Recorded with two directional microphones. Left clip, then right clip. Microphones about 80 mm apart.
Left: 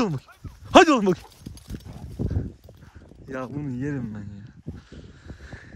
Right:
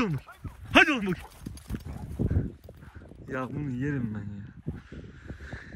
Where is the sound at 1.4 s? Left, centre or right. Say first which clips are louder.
Right 1 dB; centre.